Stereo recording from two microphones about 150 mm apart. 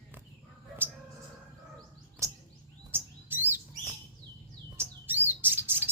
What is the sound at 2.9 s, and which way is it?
Chirp, 15° right (ahead or behind).